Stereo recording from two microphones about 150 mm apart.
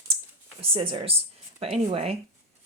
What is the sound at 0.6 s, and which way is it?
Speech, 40° right (ahead or behind).